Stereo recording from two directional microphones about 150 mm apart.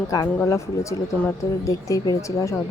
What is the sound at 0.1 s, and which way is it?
Speech, 20° left (ahead or behind).